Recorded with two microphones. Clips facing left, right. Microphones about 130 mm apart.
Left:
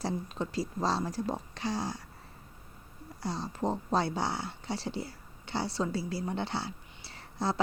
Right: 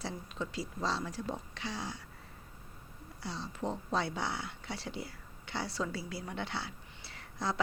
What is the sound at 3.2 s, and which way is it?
Speech, 40° left (ahead or behind).